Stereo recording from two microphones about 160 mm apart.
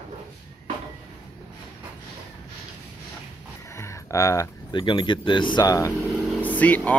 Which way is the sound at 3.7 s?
20° left (ahead or behind).